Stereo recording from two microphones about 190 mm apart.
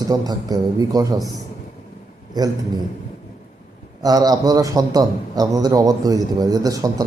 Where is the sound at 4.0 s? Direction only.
20° right (ahead or behind).